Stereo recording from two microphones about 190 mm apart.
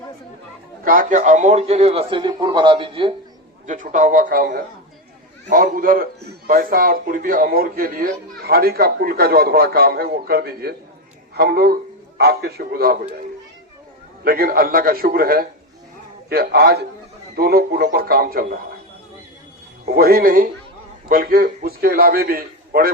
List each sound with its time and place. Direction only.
0.9 s a man's voice: 45° right (ahead or behind); by 3.2 s 30° right (ahead or behind)
3.7 s a man's voice: 40° right (ahead or behind)
14.3 s a man's voice: 50° right (ahead or behind)
19.8 s a man's voice: 55° right (ahead or behind)